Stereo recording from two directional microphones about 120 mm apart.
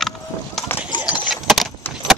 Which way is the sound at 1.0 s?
10° right (ahead or behind).